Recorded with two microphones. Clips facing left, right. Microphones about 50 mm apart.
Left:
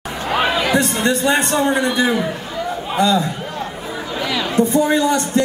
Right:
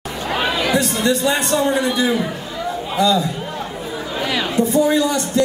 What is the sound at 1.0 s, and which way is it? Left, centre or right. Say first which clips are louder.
Speech: left 1 dB; left.